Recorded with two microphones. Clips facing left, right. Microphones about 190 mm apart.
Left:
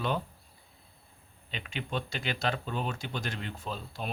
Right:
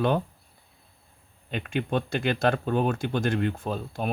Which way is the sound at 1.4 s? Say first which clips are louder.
Right 10 dB; 55° right (ahead or behind).